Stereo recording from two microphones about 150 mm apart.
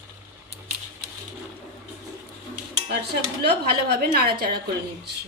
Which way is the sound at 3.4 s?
90° right.